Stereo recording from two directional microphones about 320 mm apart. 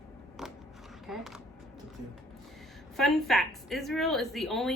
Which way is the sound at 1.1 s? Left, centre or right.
Centre.